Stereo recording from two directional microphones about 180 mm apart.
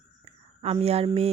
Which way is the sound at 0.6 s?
35° right (ahead or behind).